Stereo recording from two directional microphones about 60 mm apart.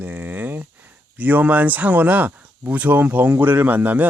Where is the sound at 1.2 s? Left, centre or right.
Right.